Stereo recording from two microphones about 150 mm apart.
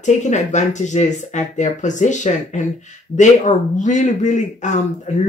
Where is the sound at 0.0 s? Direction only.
55° left (ahead or behind).